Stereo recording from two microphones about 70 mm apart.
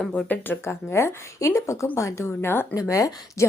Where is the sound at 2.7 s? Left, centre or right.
Left.